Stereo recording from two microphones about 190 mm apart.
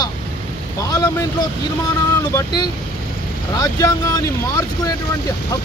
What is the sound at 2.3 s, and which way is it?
Speech, 20° left (ahead or behind).